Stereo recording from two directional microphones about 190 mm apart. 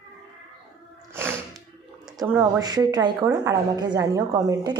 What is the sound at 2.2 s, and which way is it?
A woman's voice, 15° right (ahead or behind).